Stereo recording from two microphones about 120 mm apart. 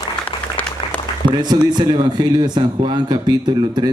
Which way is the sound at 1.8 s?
35° right (ahead or behind).